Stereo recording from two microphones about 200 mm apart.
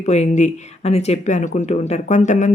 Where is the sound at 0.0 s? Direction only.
35° left (ahead or behind).